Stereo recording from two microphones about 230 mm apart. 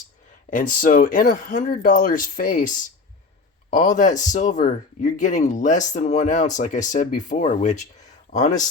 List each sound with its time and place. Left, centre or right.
0.5 s speech: left